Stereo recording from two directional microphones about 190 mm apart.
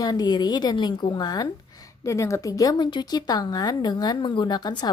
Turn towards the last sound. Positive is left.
turn(degrees=20)  # may be behind; listen again after turning